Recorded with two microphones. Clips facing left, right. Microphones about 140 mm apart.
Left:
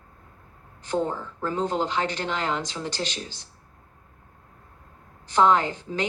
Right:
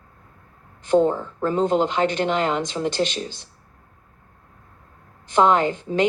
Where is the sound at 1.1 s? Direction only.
60° right (ahead or behind).